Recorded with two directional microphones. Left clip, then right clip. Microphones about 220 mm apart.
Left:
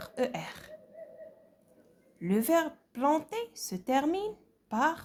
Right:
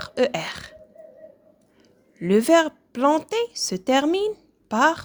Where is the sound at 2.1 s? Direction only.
30° right (ahead or behind).